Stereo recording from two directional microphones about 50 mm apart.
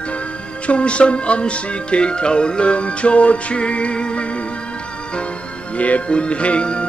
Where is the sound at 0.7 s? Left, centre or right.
Left.